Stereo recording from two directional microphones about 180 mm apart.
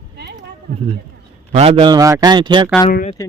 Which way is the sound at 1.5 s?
40° right (ahead or behind).